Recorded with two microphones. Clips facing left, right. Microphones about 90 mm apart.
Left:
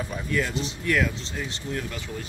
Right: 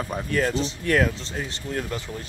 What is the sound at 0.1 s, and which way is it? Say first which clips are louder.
Speech: right 4 dB; 40° right (ahead or behind).